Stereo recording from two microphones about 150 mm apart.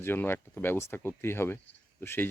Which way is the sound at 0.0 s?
15° left (ahead or behind).